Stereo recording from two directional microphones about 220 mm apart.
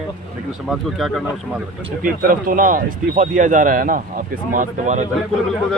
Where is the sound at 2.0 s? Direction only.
40° right (ahead or behind).